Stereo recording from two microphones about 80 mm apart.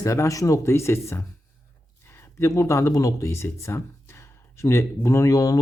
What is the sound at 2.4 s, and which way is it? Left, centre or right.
Speech, left.